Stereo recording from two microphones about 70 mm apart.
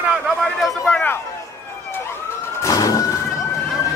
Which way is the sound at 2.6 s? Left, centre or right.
Left.